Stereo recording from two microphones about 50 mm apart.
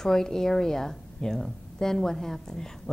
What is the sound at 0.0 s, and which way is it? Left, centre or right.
A woman's voice, centre.